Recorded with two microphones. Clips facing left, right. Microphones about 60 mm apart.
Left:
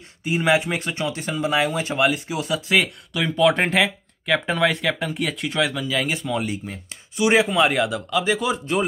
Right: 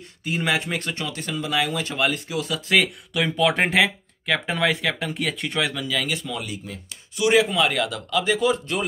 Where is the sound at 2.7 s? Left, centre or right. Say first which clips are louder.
Right 1 dB; centre.